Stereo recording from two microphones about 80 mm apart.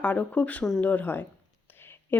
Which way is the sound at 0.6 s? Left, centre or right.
Centre.